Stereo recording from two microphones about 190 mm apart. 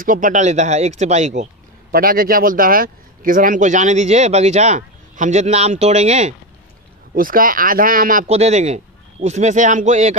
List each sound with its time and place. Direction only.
0.0 s speech: 45° right (ahead or behind)
1.9 s speech: 50° right (ahead or behind)
7.2 s speech: 50° right (ahead or behind)